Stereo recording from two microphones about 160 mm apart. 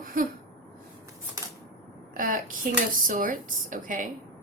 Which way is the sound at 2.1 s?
60° right (ahead or behind).